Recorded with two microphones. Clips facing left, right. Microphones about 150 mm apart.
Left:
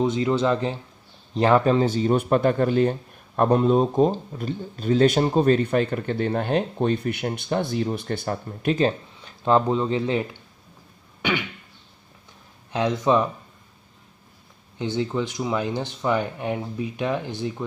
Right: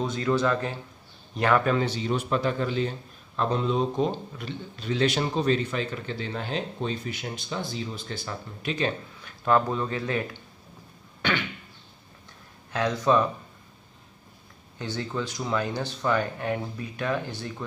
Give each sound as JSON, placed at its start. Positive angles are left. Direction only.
{"t": 0.0, "sound": "a man's voice", "side_deg": 20}
{"t": 9.2, "sound": "speech", "side_deg": 25}
{"t": 12.7, "sound": "speech", "side_deg": 20}
{"t": 14.8, "sound": "speech", "side_deg": 20}